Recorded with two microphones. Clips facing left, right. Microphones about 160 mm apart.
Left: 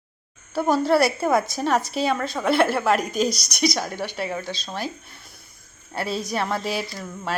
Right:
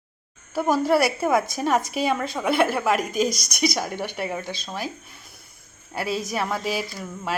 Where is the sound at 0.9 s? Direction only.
10° right (ahead or behind).